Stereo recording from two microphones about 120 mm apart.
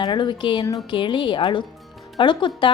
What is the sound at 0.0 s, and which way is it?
A woman's voice, 40° left (ahead or behind).